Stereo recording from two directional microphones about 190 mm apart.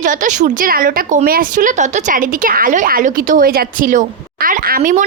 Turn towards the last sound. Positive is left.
turn(degrees=-45)  # may be behind; listen again after turning